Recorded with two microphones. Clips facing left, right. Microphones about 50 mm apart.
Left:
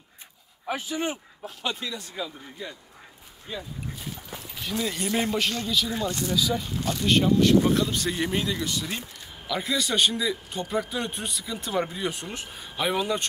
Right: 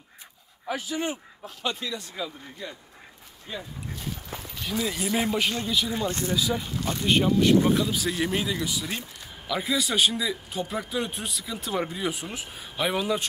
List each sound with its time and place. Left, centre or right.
0.7 s speech: left
1.4 s a man's voice: centre
3.5 s a man's voice: centre
5.4 s speech: centre
6.0 s a man's voice: right; by 13.3 s centre